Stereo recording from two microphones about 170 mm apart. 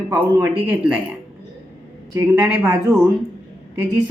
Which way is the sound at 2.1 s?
20° right (ahead or behind).